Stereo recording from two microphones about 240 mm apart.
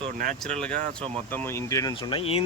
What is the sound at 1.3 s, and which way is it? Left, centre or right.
Speech, centre.